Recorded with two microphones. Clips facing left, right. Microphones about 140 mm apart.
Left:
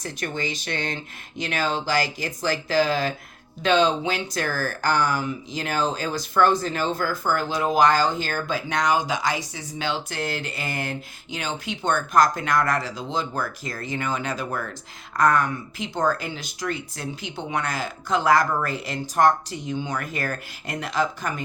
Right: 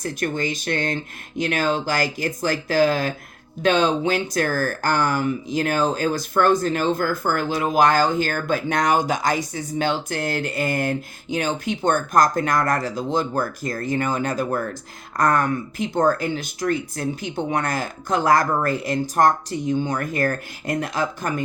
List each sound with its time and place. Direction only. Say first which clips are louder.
0.0 s speech: right 5 dB; 50° right (ahead or behind)